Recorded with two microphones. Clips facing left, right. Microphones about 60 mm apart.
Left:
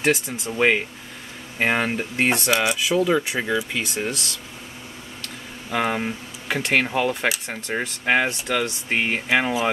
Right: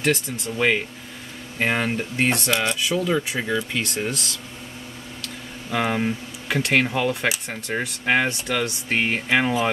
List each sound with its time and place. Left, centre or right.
0.0 s speech: centre